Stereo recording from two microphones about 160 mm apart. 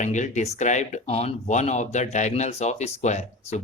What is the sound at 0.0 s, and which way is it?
Speech, 50° left (ahead or behind).